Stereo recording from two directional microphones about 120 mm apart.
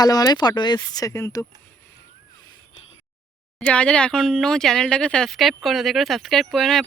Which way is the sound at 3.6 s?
10° left (ahead or behind).